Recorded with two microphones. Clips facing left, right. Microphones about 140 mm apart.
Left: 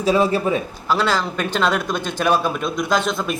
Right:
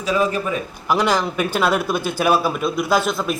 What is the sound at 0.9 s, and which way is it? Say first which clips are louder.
Speech: right 2 dB; 15° right (ahead or behind).